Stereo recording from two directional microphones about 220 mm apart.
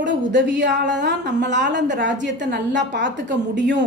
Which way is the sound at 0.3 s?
55° right (ahead or behind).